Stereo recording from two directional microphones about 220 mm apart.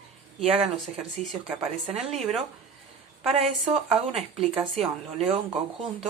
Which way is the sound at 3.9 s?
5° right (ahead or behind).